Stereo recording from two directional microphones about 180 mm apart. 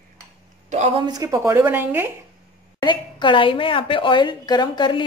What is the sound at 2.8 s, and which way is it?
A woman's voice, 25° left (ahead or behind).